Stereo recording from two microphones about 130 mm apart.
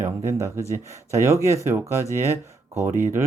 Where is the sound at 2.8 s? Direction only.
20° right (ahead or behind).